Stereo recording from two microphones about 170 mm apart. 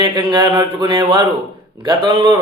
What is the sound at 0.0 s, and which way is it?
Speech, 25° right (ahead or behind).